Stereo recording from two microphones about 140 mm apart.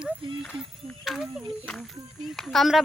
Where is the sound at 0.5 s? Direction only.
5° right (ahead or behind).